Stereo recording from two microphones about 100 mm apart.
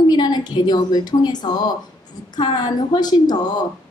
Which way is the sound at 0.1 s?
45° left (ahead or behind).